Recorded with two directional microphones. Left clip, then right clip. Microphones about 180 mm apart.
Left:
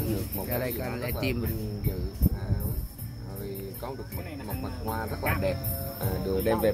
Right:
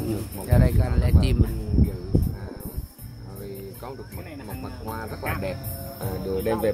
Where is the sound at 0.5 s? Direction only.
25° right (ahead or behind).